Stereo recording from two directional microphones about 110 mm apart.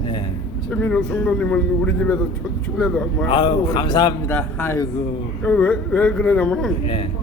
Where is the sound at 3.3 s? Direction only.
40° left (ahead or behind).